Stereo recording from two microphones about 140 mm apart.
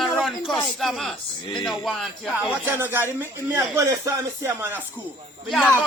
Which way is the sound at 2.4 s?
10° right (ahead or behind).